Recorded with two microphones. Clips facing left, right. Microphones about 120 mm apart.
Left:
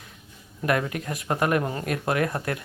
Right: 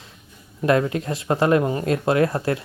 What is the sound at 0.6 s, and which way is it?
Speech, 25° right (ahead or behind).